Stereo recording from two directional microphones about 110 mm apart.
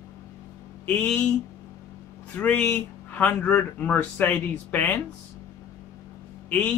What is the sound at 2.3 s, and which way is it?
Speech, 10° left (ahead or behind).